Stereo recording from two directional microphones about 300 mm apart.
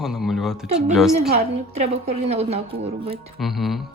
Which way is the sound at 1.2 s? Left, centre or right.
Right.